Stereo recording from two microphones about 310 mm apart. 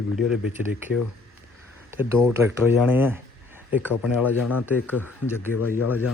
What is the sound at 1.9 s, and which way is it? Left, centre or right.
Speech, centre.